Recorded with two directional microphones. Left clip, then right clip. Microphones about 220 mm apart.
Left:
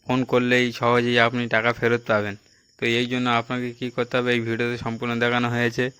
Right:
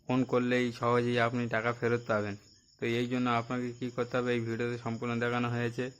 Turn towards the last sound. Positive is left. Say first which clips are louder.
# left 11 dB
turn(degrees=25)  # may be behind; listen again after turning